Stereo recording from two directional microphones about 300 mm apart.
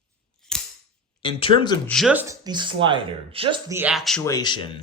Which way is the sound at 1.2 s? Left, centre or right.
Centre.